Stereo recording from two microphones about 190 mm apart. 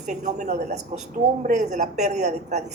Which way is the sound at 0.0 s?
40° right (ahead or behind).